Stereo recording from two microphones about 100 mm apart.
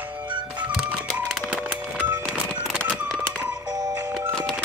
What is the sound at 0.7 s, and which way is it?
Music, 10° right (ahead or behind).